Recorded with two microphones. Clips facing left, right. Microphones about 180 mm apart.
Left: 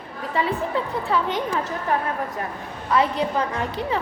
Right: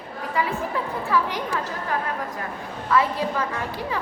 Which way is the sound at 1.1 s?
20° left (ahead or behind).